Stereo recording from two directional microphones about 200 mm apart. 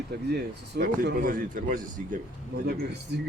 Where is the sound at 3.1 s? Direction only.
55° right (ahead or behind).